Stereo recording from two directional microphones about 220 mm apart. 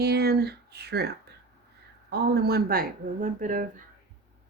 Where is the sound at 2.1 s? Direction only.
45° right (ahead or behind).